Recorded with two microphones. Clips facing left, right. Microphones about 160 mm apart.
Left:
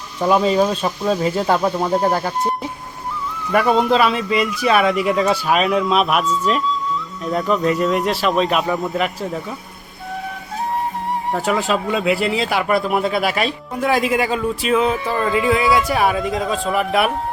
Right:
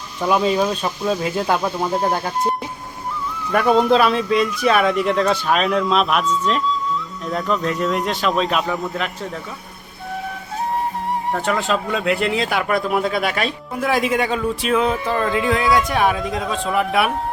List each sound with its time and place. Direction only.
0.3 s speech: centre (ahead or behind)
1.5 s speech: 25° left (ahead or behind)
2.0 s speech: centre (ahead or behind)
11.3 s speech: 5° left (ahead or behind)